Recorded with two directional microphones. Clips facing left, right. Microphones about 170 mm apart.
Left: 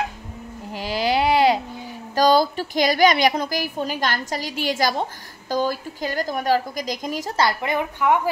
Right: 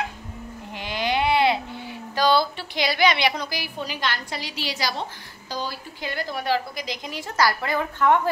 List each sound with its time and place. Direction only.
0.7 s baby cry: 35° left (ahead or behind)
2.1 s a woman's voice: 45° left (ahead or behind)
7.3 s a woman's voice: 20° left (ahead or behind)